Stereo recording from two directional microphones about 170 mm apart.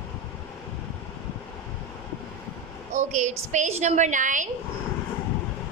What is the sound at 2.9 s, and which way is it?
A woman's voice, 45° right (ahead or behind).